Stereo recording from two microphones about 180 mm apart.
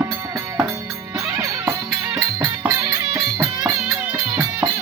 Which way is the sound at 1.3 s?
15° right (ahead or behind).